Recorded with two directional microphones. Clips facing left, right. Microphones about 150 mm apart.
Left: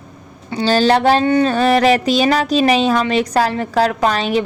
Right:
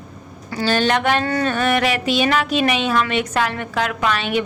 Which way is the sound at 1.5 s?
35° left (ahead or behind).